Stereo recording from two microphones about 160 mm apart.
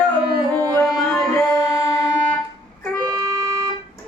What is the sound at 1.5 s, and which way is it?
Music, 20° left (ahead or behind).